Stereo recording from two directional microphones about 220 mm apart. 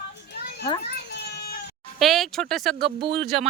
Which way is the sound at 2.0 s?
Centre (ahead or behind).